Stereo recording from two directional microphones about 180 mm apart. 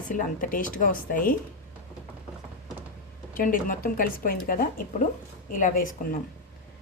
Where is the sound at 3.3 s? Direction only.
50° left (ahead or behind).